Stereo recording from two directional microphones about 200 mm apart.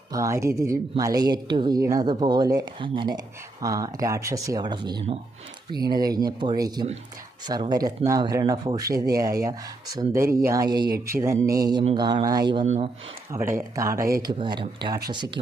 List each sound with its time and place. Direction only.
0.1 s speech: 15° right (ahead or behind); by 12.9 s 30° right (ahead or behind)
13.3 s speech: 15° right (ahead or behind)